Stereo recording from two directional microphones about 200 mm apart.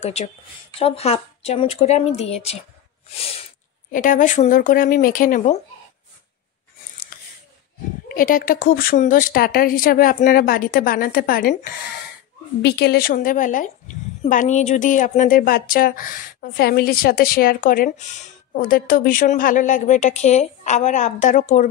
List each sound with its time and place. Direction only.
0.0 s a woman's voice: 35° left (ahead or behind)
3.9 s speech: 40° left (ahead or behind)
7.1 s a sound: 45° left (ahead or behind)
8.1 s a woman's voice: 45° left (ahead or behind)